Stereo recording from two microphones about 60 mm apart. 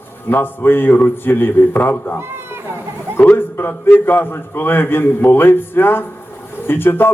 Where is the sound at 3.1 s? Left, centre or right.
Left.